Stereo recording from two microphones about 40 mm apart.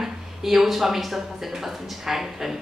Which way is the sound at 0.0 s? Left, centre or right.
Centre.